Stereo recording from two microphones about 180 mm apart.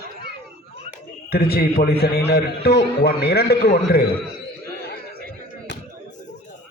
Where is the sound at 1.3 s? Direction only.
60° left (ahead or behind).